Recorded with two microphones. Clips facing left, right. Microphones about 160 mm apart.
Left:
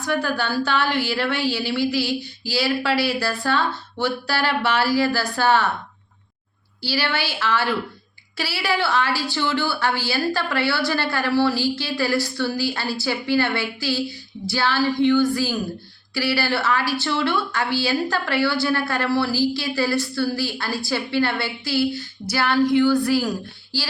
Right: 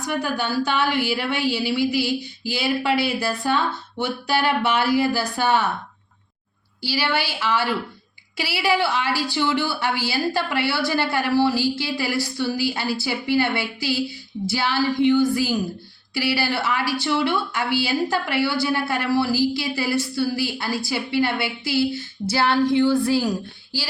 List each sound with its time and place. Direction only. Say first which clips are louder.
0.2 s a woman's voice: even; 15° right (ahead or behind)
6.8 s a woman's voice: right 1 dB; 10° right (ahead or behind)